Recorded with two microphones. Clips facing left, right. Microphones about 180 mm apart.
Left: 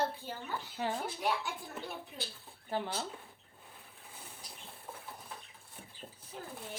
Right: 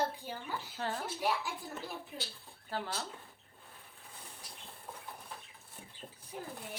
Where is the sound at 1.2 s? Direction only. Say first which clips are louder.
Right 1 dB; centre (ahead or behind).